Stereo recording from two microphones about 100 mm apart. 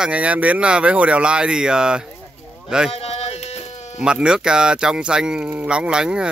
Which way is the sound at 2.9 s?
90° left.